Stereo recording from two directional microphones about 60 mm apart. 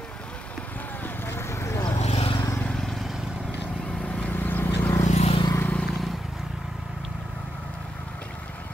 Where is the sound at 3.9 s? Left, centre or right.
Centre.